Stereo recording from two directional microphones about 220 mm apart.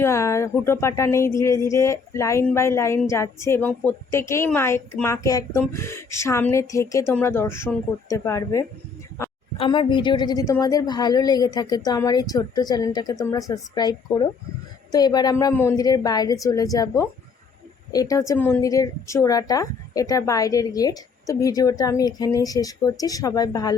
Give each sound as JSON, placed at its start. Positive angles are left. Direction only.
{"t": 0.0, "sound": "speech", "side_deg": 10}